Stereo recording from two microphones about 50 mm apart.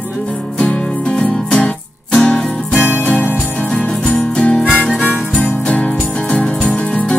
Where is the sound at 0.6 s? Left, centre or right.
Left.